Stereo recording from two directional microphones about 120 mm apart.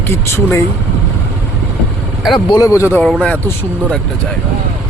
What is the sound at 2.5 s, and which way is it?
Speech, 30° left (ahead or behind).